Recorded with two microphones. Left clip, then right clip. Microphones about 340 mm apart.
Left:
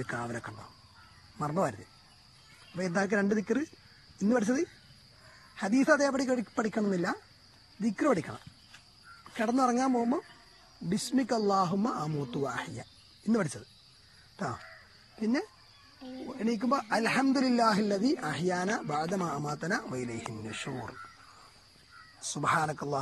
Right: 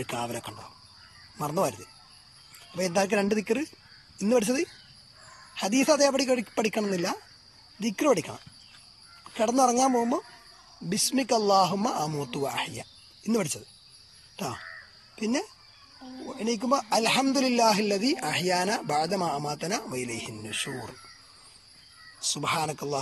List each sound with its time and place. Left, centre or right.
0.0 s speech: centre
2.8 s speech: centre
9.4 s speech: centre
14.3 s a sound: centre
15.1 s speech: centre
22.4 s speech: centre